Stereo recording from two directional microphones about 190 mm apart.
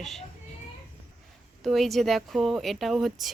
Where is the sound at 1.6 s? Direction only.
Centre (ahead or behind).